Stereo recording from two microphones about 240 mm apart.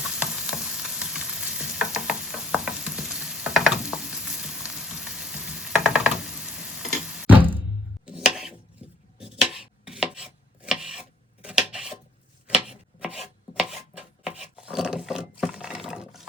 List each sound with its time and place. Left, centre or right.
0.0 s frying: centre
7.3 s music: right
8.0 s chopping: centre
11.4 s a sound: centre
12.5 s chopping: centre
14.3 s wood: centre